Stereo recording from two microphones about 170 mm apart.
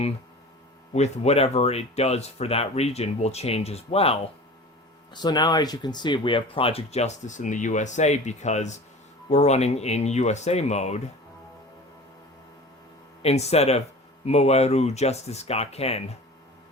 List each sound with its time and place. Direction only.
0.9 s speech: 40° left (ahead or behind)
5.1 s speech: 25° left (ahead or behind); by 11.0 s 40° left (ahead or behind)
13.2 s speech: 40° left (ahead or behind)